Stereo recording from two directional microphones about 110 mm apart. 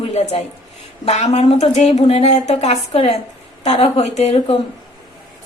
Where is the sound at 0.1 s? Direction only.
85° left.